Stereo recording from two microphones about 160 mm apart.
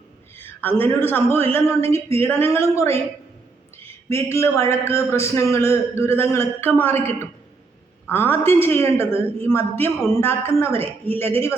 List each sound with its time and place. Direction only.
0.3 s a sound: 15° left (ahead or behind)
0.8 s a man's voice: 15° left (ahead or behind)
4.1 s a man's voice: 15° left (ahead or behind)